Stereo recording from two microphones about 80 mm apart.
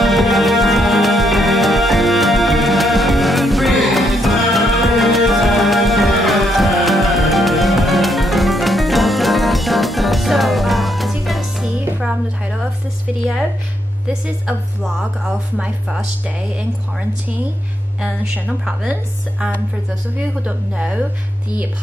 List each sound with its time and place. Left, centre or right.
0.0 s music: centre
12.0 s a sound: centre
14.8 s speech: centre
20.2 s speech: centre